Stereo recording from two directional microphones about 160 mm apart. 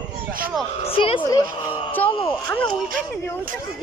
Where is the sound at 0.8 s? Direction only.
35° left (ahead or behind).